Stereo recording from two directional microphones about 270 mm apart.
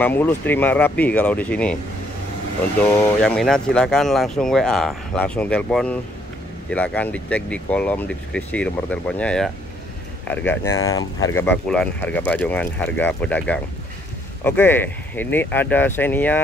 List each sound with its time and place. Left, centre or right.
0.0 s speech: centre
2.8 s speech: centre